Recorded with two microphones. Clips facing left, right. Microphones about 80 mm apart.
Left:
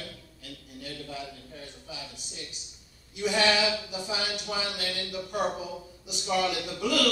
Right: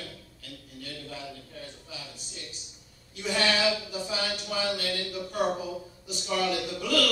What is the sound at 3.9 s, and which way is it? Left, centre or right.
Speech, centre.